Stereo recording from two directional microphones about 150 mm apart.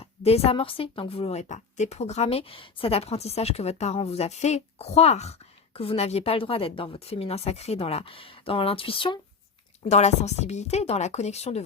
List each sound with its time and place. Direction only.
0.0 s a woman's voice: 45° left (ahead or behind)
9.9 s a woman's voice: 50° left (ahead or behind)